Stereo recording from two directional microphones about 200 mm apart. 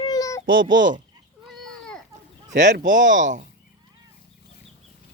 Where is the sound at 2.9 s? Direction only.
70° right (ahead or behind).